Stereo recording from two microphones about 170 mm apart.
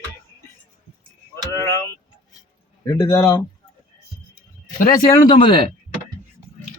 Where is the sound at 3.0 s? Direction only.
20° left (ahead or behind).